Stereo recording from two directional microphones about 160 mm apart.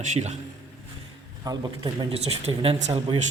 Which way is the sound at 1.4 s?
25° right (ahead or behind).